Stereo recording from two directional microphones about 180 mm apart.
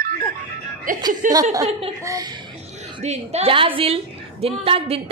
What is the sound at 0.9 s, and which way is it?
Speech, 50° right (ahead or behind).